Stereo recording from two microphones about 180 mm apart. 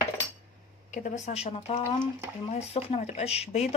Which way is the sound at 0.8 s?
45° left (ahead or behind).